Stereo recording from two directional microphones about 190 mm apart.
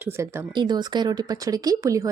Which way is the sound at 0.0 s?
15° right (ahead or behind).